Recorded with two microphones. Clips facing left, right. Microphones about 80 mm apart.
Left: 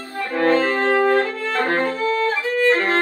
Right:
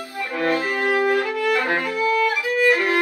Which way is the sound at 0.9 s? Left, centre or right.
Left.